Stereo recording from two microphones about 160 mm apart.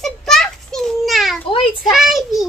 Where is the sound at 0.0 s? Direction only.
Centre (ahead or behind).